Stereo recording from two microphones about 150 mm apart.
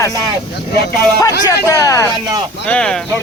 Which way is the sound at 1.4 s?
20° left (ahead or behind).